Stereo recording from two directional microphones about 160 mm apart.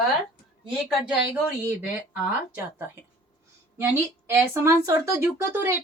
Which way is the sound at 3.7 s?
15° right (ahead or behind).